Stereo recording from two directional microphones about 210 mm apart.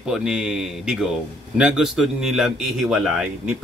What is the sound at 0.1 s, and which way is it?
A man's voice, 5° right (ahead or behind).